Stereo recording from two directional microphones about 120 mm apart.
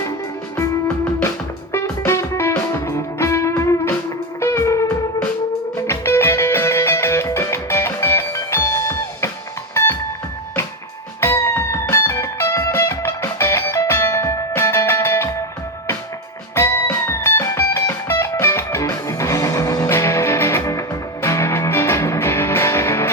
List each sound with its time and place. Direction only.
1.7 s music: 25° left (ahead or behind)
5.9 s music: 20° left (ahead or behind)
11.2 s music: 20° left (ahead or behind)
16.6 s music: 20° left (ahead or behind)